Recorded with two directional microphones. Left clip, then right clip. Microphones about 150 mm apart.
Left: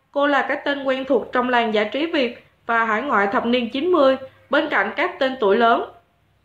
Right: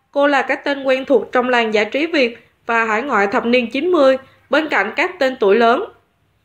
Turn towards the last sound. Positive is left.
turn(degrees=-15)  # may be behind; listen again after turning